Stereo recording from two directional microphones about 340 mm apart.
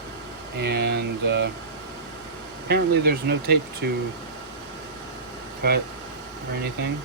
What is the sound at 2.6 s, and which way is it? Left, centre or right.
Speech, right.